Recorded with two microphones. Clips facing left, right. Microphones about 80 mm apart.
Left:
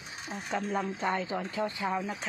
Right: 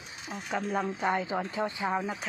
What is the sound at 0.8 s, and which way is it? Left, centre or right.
Speech, centre.